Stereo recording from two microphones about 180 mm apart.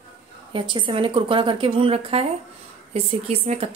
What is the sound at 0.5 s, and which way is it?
A woman's voice, 25° right (ahead or behind).